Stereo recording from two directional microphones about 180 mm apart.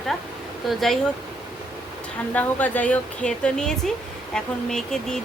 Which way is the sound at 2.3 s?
10° left (ahead or behind).